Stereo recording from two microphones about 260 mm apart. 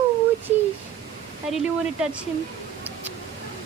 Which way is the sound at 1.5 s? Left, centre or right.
Centre.